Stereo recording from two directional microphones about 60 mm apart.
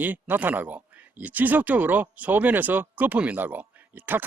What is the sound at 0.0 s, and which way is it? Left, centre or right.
Speech, right.